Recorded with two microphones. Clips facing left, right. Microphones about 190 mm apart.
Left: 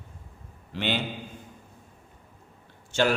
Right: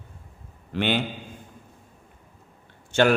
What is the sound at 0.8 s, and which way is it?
Speech, 55° right (ahead or behind).